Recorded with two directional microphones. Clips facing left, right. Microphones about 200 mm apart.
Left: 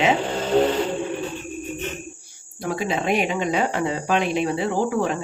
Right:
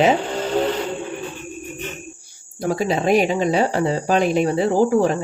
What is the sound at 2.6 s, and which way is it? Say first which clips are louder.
Speech: right 4 dB; 40° right (ahead or behind).